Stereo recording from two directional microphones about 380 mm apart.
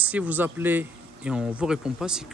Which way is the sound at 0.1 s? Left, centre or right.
Centre.